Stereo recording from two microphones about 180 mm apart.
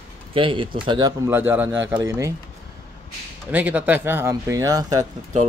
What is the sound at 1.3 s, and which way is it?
Speech, 10° right (ahead or behind).